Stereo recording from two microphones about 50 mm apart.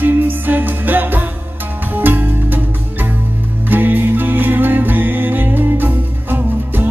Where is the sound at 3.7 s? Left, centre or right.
Right.